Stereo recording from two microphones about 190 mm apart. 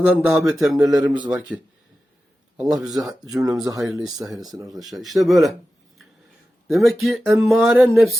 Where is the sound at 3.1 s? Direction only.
20° right (ahead or behind).